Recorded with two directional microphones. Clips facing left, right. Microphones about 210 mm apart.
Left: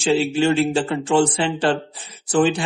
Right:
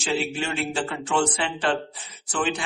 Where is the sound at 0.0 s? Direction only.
30° left (ahead or behind).